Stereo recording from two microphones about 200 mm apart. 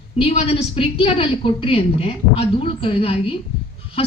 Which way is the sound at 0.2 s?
30° left (ahead or behind).